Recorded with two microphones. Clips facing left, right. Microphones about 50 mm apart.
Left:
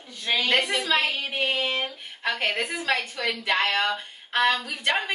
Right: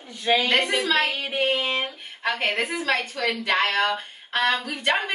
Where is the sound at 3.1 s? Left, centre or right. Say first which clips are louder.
Right 2 dB; right.